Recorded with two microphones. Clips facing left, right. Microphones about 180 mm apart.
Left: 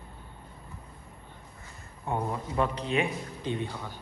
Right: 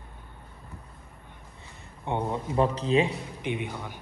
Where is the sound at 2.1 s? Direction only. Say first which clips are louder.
Right 2 dB; 25° right (ahead or behind).